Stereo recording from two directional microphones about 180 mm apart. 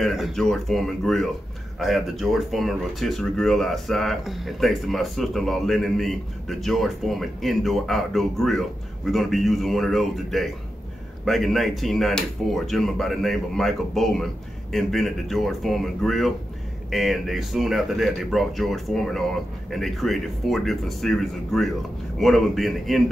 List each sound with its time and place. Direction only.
0.0 s speech: centre (ahead or behind)